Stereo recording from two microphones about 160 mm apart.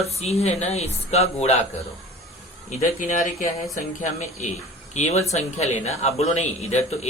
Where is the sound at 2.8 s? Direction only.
55° left (ahead or behind).